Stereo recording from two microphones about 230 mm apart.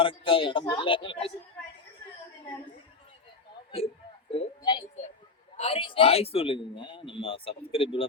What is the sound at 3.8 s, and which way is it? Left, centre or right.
Speech, left.